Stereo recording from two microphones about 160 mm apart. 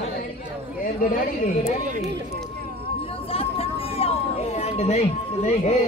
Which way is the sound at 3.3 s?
35° left (ahead or behind).